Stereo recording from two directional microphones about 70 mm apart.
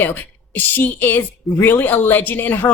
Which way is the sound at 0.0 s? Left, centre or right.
Left.